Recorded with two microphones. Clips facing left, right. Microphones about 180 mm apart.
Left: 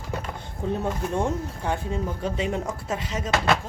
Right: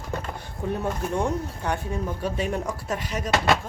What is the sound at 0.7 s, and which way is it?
Speech, 25° left (ahead or behind).